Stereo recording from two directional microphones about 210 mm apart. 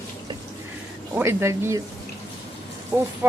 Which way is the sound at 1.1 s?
10° right (ahead or behind).